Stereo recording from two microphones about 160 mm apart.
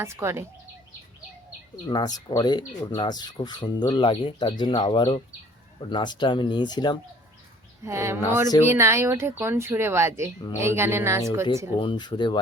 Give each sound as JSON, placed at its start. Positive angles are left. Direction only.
{"t": 0.0, "sound": "speech", "side_deg": -15}
{"t": 1.9, "sound": "speech", "side_deg": 25}
{"t": 7.9, "sound": "speech", "side_deg": -15}
{"t": 11.8, "sound": "speech", "side_deg": 30}